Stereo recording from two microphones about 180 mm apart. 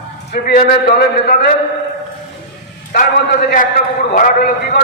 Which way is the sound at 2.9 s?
50° left (ahead or behind).